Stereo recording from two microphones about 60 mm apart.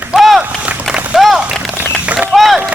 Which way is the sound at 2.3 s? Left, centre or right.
Centre.